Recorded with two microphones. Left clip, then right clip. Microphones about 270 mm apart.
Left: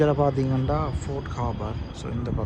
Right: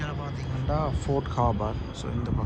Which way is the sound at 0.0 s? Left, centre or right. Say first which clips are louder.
Left 15 dB; centre.